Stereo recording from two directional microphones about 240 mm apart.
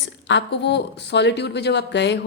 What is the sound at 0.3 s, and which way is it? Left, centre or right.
Speech, left.